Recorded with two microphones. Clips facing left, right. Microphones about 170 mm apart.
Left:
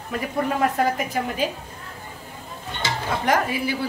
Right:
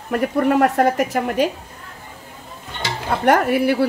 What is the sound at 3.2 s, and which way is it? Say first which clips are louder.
Speech: right 8 dB; 60° right (ahead or behind).